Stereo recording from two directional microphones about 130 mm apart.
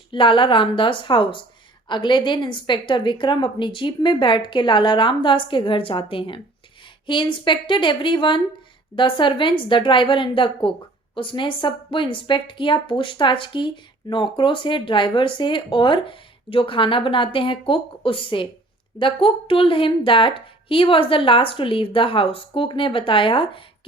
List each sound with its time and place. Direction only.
0.1 s a woman's voice: 40° left (ahead or behind)